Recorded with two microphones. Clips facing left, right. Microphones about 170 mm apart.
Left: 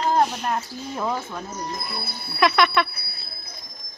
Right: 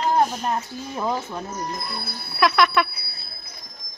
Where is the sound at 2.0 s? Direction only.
Centre (ahead or behind).